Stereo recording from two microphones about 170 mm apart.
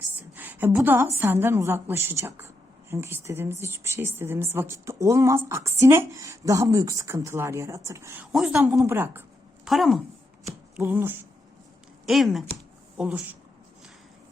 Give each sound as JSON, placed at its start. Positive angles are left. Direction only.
{"t": 0.3, "sound": "speech", "side_deg": -10}
{"t": 8.3, "sound": "speech", "side_deg": 0}
{"t": 8.8, "sound": "speech", "side_deg": -15}
{"t": 9.6, "sound": "speech", "side_deg": 0}
{"t": 10.8, "sound": "speech", "side_deg": -10}
{"t": 12.0, "sound": "speech", "side_deg": 0}